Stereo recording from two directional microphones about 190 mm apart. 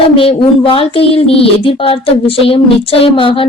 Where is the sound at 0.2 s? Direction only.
30° left (ahead or behind).